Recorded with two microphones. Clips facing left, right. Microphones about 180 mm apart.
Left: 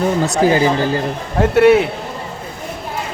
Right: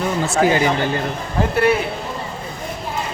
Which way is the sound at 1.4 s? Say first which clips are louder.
Left 7 dB; 75° left (ahead or behind).